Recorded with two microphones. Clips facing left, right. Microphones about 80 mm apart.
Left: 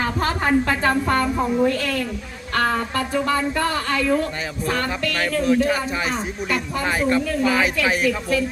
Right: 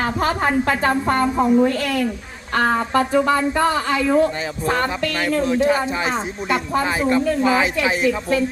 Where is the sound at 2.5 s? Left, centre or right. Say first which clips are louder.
Right 4 dB; right.